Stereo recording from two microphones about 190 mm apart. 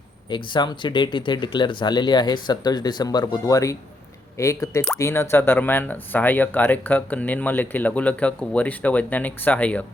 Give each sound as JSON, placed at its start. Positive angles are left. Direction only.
{"t": 0.3, "sound": "speech", "side_deg": 25}